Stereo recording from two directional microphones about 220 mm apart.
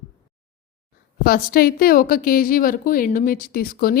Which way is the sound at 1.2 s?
40° left (ahead or behind).